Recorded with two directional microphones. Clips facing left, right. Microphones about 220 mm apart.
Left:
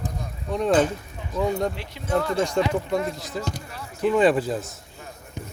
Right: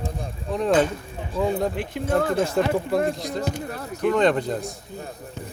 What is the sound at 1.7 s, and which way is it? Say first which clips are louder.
Speech: right 2 dB; 50° right (ahead or behind).